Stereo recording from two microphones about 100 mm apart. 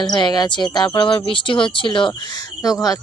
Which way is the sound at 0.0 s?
45° left (ahead or behind).